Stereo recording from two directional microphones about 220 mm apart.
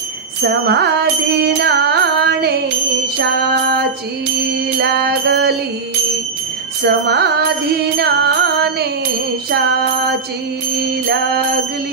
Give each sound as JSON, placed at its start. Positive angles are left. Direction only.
{"t": 0.4, "sound": "music", "side_deg": -45}
{"t": 3.2, "sound": "jingle bell", "side_deg": -50}
{"t": 4.6, "sound": "music", "side_deg": -50}
{"t": 6.8, "sound": "music", "side_deg": -45}
{"t": 9.5, "sound": "jingle bell", "side_deg": -45}
{"t": 10.8, "sound": "music", "side_deg": -45}